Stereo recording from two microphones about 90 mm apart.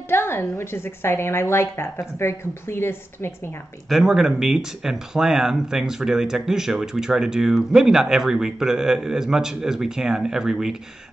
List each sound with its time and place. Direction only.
0.1 s a woman's voice: 25° left (ahead or behind)
3.9 s speech: 5° right (ahead or behind)